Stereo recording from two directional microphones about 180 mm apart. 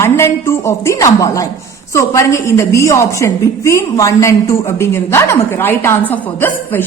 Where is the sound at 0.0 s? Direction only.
15° left (ahead or behind).